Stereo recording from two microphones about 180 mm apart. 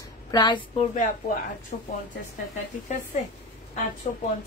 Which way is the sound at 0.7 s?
45° left (ahead or behind).